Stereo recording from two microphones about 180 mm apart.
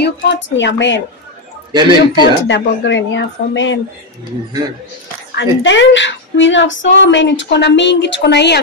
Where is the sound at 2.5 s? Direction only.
90° left.